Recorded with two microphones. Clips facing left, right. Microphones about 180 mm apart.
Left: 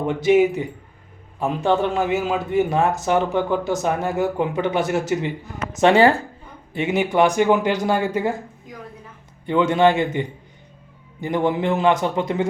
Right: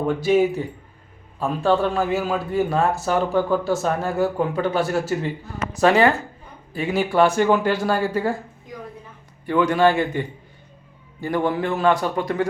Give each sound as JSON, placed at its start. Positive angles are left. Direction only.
{"t": 0.0, "sound": "a man's voice", "side_deg": 20}
{"t": 6.7, "sound": "a man's voice", "side_deg": 20}
{"t": 9.5, "sound": "a man's voice", "side_deg": 20}